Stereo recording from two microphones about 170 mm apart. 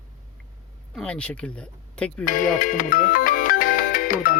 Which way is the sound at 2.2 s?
50° left (ahead or behind).